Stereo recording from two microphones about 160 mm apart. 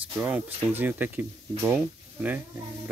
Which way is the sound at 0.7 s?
10° right (ahead or behind).